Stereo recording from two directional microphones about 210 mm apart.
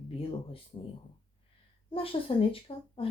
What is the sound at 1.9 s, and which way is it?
Speech, 25° left (ahead or behind).